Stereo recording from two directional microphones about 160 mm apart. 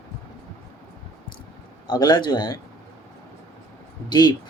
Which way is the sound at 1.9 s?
25° left (ahead or behind).